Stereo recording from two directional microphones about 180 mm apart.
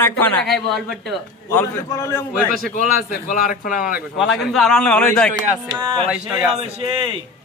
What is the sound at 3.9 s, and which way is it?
A man's voice, centre (ahead or behind).